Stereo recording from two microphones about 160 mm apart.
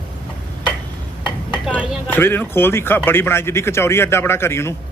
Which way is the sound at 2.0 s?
15° left (ahead or behind).